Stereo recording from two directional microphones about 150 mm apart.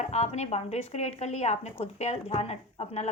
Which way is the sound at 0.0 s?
45° left (ahead or behind).